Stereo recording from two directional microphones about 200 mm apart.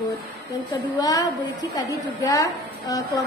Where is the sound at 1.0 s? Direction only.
20° left (ahead or behind).